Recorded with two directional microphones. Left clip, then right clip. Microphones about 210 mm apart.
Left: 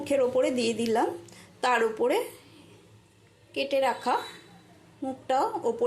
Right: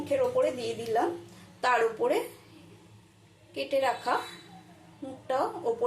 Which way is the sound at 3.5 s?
25° left (ahead or behind).